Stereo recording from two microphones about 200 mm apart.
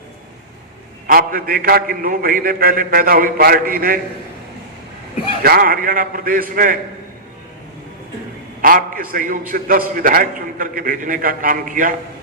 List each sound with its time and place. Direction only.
1.0 s a man's voice: 45° right (ahead or behind)
5.4 s a man's voice: 45° right (ahead or behind)
8.6 s a man's voice: 45° right (ahead or behind)